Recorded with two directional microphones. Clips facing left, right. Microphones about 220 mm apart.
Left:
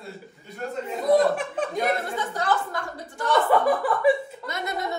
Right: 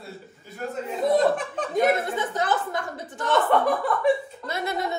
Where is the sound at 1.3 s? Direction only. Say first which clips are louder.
Right 1 dB; 5° left (ahead or behind).